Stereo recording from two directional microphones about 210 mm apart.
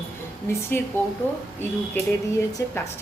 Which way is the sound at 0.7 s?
10° left (ahead or behind).